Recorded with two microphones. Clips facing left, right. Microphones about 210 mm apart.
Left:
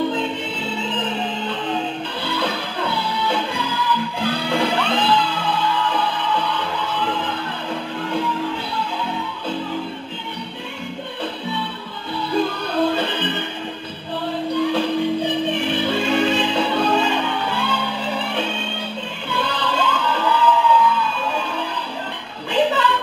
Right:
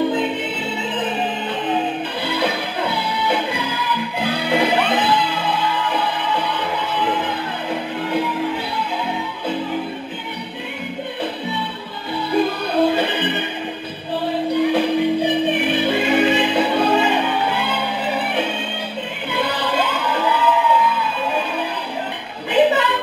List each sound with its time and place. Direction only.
0.7 s music: 10° right (ahead or behind)
2.2 s music: 15° right (ahead or behind)
12.4 s music: 15° right (ahead or behind)
14.7 s music: 15° right (ahead or behind)
22.5 s a sound: 20° right (ahead or behind)